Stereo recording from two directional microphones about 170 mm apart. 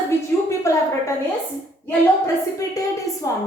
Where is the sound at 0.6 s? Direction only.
15° left (ahead or behind).